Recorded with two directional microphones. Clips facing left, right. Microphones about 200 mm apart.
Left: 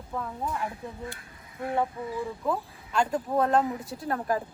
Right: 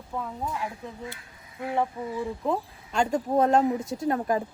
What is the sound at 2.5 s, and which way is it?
A woman's voice, 25° right (ahead or behind).